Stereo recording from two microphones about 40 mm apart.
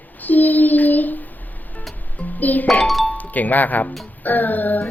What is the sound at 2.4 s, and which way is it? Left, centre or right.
A woman's voice, left.